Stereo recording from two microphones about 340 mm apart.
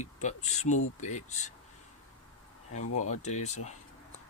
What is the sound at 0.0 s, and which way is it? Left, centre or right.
Speech, left.